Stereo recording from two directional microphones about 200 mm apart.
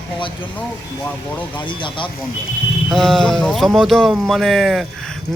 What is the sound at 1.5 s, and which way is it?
Speech, 25° left (ahead or behind).